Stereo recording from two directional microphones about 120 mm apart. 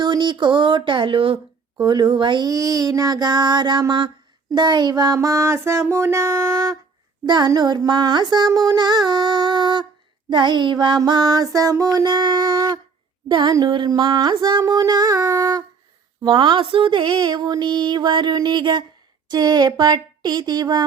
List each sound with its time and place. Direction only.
0.0 s speech: 40° right (ahead or behind)
4.5 s music: 40° right (ahead or behind)
7.3 s speech: 40° right (ahead or behind)
13.2 s a sound: 40° right (ahead or behind)
13.5 s speech: 35° right (ahead or behind)
16.2 s speech: 40° right (ahead or behind)